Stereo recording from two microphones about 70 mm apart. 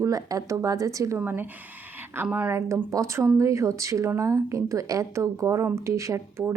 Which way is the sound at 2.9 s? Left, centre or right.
Right.